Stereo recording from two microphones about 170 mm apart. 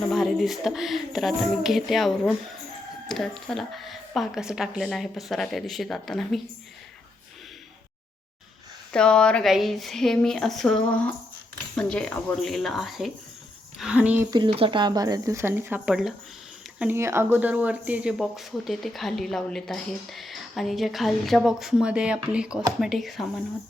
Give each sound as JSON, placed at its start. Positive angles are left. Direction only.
{"t": 0.1, "sound": "speech", "side_deg": 0}
{"t": 8.9, "sound": "speech", "side_deg": 5}
{"t": 14.3, "sound": "speech", "side_deg": -30}